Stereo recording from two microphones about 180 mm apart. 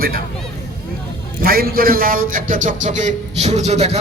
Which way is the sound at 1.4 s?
55° right (ahead or behind).